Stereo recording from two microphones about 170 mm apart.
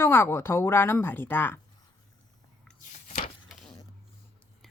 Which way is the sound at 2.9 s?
45° left (ahead or behind).